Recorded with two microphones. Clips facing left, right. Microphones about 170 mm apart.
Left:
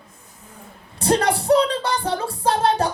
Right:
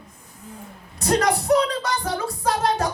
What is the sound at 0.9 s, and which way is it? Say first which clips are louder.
A woman's voice: left 1 dB; 30° left (ahead or behind).